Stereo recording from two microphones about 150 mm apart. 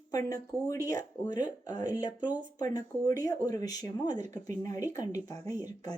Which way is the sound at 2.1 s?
10° right (ahead or behind).